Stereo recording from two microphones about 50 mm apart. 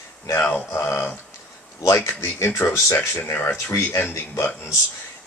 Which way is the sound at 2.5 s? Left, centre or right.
Left.